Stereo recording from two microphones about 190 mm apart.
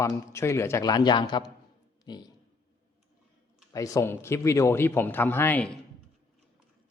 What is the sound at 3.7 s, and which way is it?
A man's voice, 15° left (ahead or behind).